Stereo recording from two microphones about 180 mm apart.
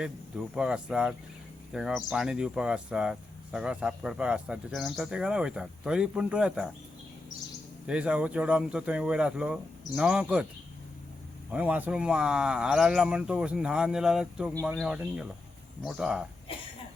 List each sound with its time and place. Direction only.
0.0 s speech: 5° right (ahead or behind)
7.9 s speech: 5° right (ahead or behind)
11.5 s speech: 10° right (ahead or behind)
16.5 s cough: 30° left (ahead or behind)